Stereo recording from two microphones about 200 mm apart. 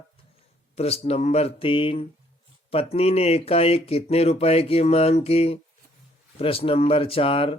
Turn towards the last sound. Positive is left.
turn(degrees=25)  # may be behind; listen again after turning